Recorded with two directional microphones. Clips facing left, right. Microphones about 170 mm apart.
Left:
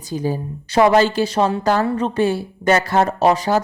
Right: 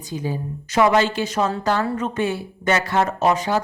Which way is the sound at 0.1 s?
35° left (ahead or behind).